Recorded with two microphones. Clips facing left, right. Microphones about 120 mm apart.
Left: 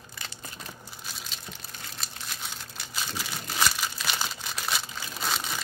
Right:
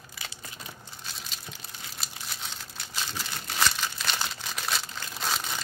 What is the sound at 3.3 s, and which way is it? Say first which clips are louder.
Crumpling: even; 5° left (ahead or behind).